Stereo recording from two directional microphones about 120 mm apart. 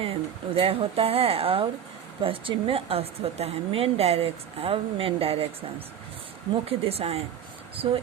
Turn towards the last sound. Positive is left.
turn(degrees=-50)  # may be behind; listen again after turning